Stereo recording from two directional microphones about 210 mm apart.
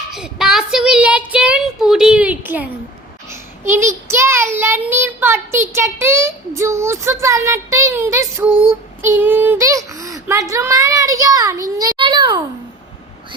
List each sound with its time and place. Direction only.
0.1 s child singing: 5° right (ahead or behind)
3.2 s a child's voice: 10° right (ahead or behind)